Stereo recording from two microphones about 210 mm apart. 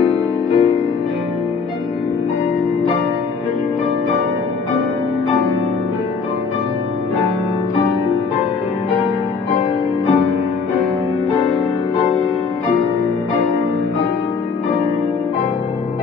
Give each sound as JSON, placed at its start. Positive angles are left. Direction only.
{"t": 0.0, "sound": "music", "side_deg": 25}